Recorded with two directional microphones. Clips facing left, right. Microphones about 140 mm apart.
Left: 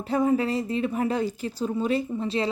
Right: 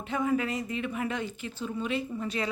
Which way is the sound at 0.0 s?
35° left (ahead or behind).